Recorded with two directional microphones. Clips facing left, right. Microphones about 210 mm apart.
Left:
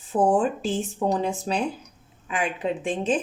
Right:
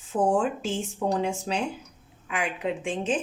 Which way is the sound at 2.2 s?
35° left (ahead or behind).